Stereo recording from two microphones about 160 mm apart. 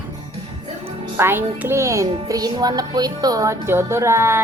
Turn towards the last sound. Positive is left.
turn(degrees=-15)  # may be behind; listen again after turning